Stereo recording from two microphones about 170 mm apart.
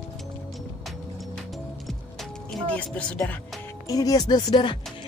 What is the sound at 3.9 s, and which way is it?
Speech, 20° left (ahead or behind).